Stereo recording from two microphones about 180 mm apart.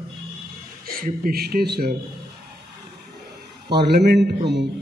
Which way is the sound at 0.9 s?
55° right (ahead or behind).